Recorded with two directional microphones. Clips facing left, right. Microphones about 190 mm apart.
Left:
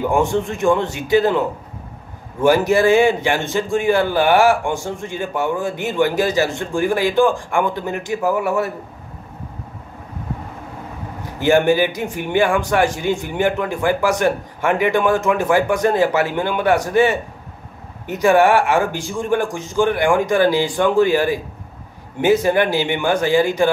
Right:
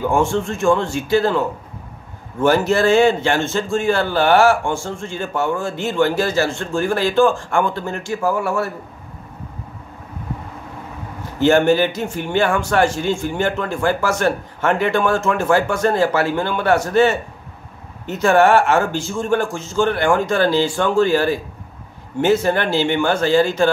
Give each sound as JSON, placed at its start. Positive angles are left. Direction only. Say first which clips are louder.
{"t": 0.1, "sound": "a man's voice", "louder": "even", "side_deg": 15}
{"t": 2.4, "sound": "a man's voice", "louder": "left 1 dB", "side_deg": 15}
{"t": 11.3, "sound": "a man's voice", "louder": "right 1 dB", "side_deg": 15}